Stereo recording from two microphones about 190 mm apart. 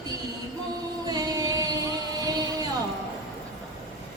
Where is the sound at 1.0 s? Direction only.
20° right (ahead or behind).